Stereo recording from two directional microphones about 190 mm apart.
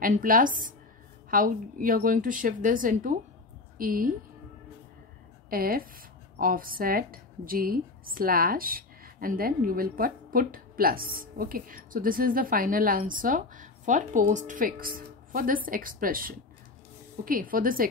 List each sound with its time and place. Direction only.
0.0 s a woman's voice: 45° right (ahead or behind)
5.5 s speech: 50° right (ahead or behind)